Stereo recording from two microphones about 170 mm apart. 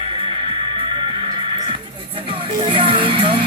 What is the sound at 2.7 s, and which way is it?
Music, 30° right (ahead or behind).